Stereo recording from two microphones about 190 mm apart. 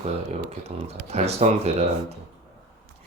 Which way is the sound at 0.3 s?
35° right (ahead or behind).